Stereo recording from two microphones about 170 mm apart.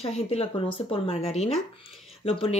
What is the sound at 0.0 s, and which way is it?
Speech, 35° left (ahead or behind).